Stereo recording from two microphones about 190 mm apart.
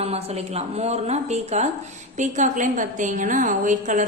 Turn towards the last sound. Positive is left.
turn(degrees=-40)  # may be behind; listen again after turning